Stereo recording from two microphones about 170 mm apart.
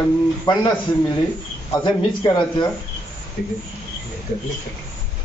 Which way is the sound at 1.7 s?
25° left (ahead or behind).